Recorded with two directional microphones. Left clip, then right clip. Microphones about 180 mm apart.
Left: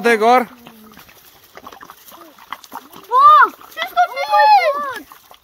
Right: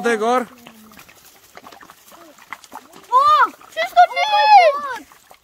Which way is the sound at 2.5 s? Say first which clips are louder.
Left 4 dB; 25° left (ahead or behind).